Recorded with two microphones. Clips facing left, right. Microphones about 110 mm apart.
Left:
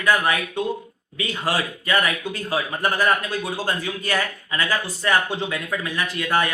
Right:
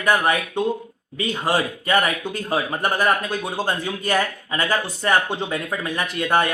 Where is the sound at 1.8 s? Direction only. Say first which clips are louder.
Right 1 dB; 25° right (ahead or behind).